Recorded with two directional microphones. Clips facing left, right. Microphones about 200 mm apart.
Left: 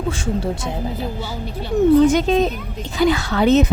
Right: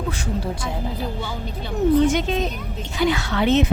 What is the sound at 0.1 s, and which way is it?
Speech, 25° left (ahead or behind).